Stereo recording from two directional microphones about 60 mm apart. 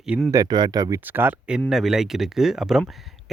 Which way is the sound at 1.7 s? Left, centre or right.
Centre.